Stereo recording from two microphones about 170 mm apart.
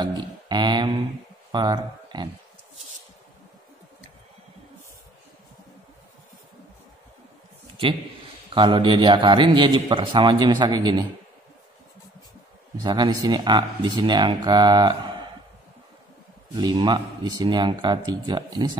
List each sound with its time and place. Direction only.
0.0 s a sound: 25° right (ahead or behind)
1.5 s speech: 25° right (ahead or behind)
8.5 s a man's voice: 30° right (ahead or behind)
12.8 s a man's voice: 25° right (ahead or behind)
16.5 s a man's voice: 25° right (ahead or behind)